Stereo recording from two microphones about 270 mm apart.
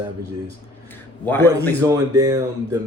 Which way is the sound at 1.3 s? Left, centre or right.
Centre.